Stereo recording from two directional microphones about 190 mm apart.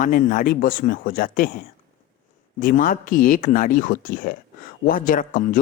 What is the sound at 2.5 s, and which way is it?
Speech, 45° left (ahead or behind).